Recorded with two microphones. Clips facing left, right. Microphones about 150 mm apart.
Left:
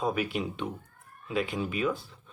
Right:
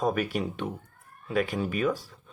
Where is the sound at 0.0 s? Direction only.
50° right (ahead or behind).